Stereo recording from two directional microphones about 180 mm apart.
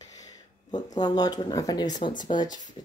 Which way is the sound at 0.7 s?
20° left (ahead or behind).